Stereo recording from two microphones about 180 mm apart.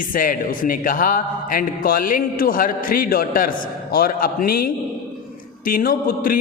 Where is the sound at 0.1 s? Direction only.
50° left (ahead or behind).